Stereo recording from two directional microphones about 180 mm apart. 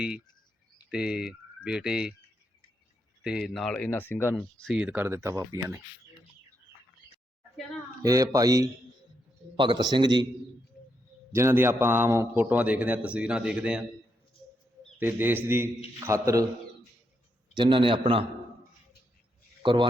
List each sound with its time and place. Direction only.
0.9 s speech: 5° right (ahead or behind)
3.2 s speech: centre (ahead or behind); by 5.8 s 20° right (ahead or behind)
8.0 s a man's voice: 20° right (ahead or behind)
11.3 s a man's voice: 15° right (ahead or behind)
14.9 s a man's voice: 10° right (ahead or behind)
17.6 s a man's voice: 30° right (ahead or behind)
19.6 s a man's voice: 25° right (ahead or behind)